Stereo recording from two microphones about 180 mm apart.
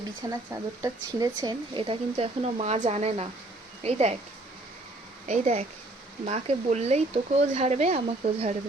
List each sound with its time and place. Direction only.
0.3 s speech: 20° right (ahead or behind); by 4.1 s 35° right (ahead or behind)
5.3 s speech: 35° right (ahead or behind)